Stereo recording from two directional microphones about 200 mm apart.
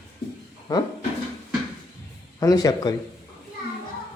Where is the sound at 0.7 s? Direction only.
20° left (ahead or behind).